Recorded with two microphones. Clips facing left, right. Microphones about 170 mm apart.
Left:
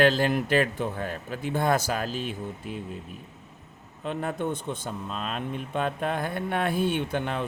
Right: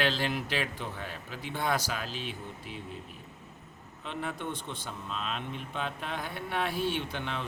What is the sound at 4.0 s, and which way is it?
Speech, 45° left (ahead or behind).